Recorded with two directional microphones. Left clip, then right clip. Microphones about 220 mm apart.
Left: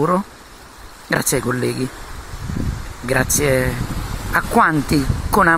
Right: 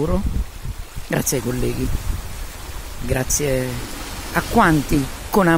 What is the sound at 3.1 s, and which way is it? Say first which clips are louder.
Speech: left 4 dB; 10° right (ahead or behind).